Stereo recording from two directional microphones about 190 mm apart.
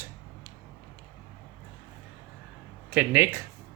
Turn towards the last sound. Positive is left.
turn(degrees=-10)  # may be behind; listen again after turning